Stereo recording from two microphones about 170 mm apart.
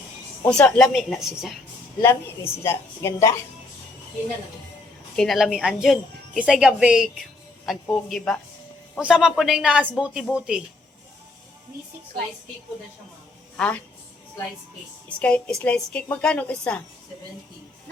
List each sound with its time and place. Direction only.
0.6 s speech: centre (ahead or behind)
2.0 s a woman's voice: 15° left (ahead or behind)
5.1 s speech: centre (ahead or behind)
13.6 s a woman's voice: 5° left (ahead or behind)
15.2 s a woman's voice: 5° left (ahead or behind)